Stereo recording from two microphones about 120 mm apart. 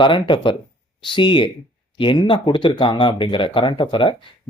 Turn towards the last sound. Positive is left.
turn(degrees=45)  # may be behind; listen again after turning